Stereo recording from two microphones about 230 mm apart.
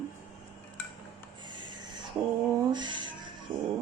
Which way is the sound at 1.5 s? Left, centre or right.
Centre.